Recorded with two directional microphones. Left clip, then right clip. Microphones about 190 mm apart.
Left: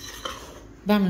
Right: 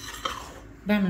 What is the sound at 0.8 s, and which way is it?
Speech, 20° left (ahead or behind).